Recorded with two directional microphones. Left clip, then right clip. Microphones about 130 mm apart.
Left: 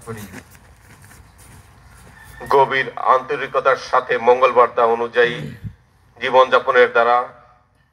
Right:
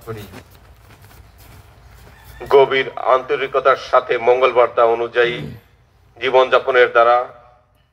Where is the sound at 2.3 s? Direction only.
45° right (ahead or behind).